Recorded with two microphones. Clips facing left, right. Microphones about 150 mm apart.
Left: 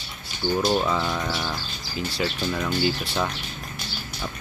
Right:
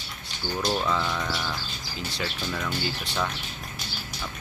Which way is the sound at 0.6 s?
15° left (ahead or behind).